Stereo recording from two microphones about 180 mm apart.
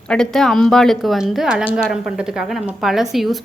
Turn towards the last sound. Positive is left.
turn(degrees=0)  # may be behind; listen again after turning